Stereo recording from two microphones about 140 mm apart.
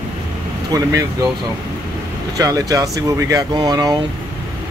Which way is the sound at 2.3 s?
25° right (ahead or behind).